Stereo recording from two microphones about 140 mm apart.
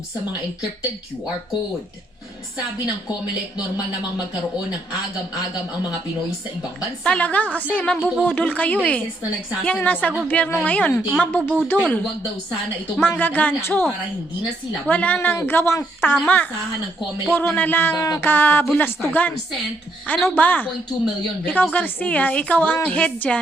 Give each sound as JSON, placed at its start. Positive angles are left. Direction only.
{"t": 7.0, "sound": "a woman's voice", "side_deg": 10}
{"t": 13.0, "sound": "a woman's voice", "side_deg": 15}
{"t": 14.8, "sound": "a woman's voice", "side_deg": 10}
{"t": 17.9, "sound": "speech", "side_deg": 25}
{"t": 18.3, "sound": "a woman's voice", "side_deg": 15}